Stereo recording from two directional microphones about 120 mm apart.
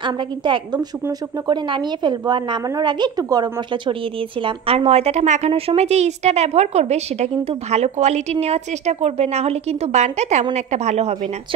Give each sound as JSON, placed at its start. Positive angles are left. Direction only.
{"t": 0.0, "sound": "a woman's voice", "side_deg": -40}
{"t": 4.4, "sound": "a woman's voice", "side_deg": -50}
{"t": 5.5, "sound": "a woman's voice", "side_deg": -55}